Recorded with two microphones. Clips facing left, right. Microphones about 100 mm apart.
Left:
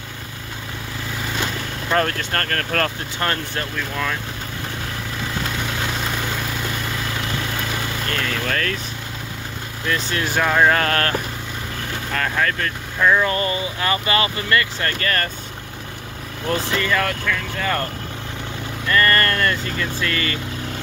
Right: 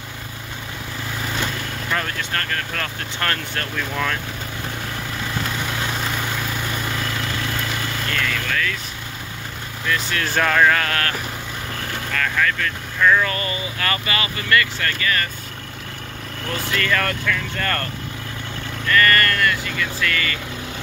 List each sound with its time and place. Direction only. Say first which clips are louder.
2.0 s speech: left 8 dB; 40° left (ahead or behind)
3.2 s speech: left 1 dB; 20° left (ahead or behind)
3.7 s speech: right 2 dB; centre (ahead or behind)
8.1 s vehicle: left 1 dB; 35° left (ahead or behind)
10.2 s speech: even; 10° left (ahead or behind)
10.6 s speech: left 3 dB; 30° left (ahead or behind)
12.1 s vehicle: even; 30° left (ahead or behind)
13.0 s speech: left 1 dB; 20° left (ahead or behind)
15.0 s speech: even; 45° left (ahead or behind)
16.4 s speech: left 3 dB; 25° left (ahead or behind)
16.9 s speech: even; 5° left (ahead or behind)
18.9 s speech: even; 25° left (ahead or behind)